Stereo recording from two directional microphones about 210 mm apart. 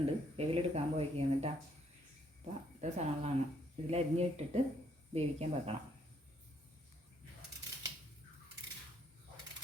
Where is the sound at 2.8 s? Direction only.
30° right (ahead or behind).